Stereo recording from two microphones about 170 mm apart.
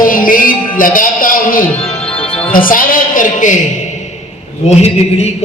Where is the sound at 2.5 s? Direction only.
55° left (ahead or behind).